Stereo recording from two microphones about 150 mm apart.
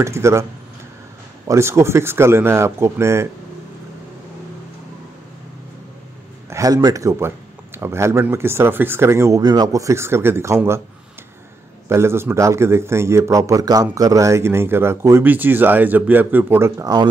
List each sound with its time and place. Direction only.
0.0 s speech: 20° right (ahead or behind)
1.5 s speech: 20° right (ahead or behind)
6.5 s speech: 25° right (ahead or behind)
11.9 s speech: 15° right (ahead or behind)